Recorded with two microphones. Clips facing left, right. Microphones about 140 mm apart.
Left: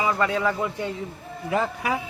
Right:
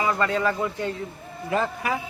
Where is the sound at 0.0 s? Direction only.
10° left (ahead or behind).